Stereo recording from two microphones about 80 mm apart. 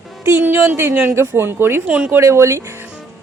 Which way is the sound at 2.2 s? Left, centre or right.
Right.